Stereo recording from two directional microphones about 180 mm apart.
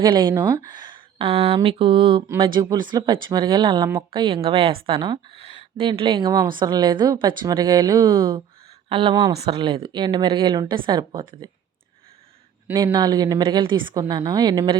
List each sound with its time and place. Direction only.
0.0 s a woman's voice: 25° right (ahead or behind)
8.9 s speech: 30° right (ahead or behind)
12.7 s speech: 25° right (ahead or behind)